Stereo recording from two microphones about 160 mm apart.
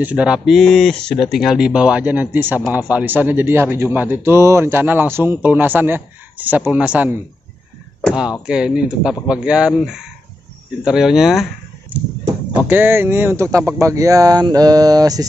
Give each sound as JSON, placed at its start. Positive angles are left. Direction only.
{"t": 0.0, "sound": "speech", "side_deg": -5}
{"t": 12.5, "sound": "speech", "side_deg": -10}